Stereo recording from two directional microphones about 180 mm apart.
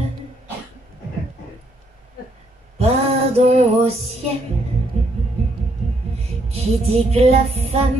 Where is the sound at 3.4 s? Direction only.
35° right (ahead or behind).